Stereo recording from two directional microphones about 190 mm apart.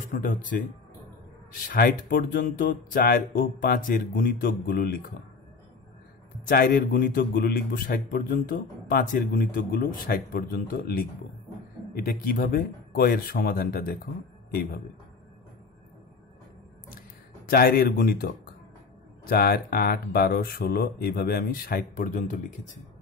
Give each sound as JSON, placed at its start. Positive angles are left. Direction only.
{"t": 0.1, "sound": "a man's voice", "side_deg": 45}
{"t": 1.8, "sound": "a man's voice", "side_deg": 50}
{"t": 6.5, "sound": "a man's voice", "side_deg": 50}
{"t": 17.5, "sound": "a man's voice", "side_deg": 50}